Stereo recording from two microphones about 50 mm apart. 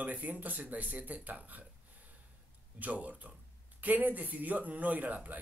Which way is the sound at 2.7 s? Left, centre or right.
Right.